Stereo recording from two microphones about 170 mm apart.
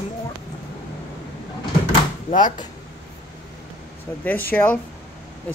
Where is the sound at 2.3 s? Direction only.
50° left (ahead or behind).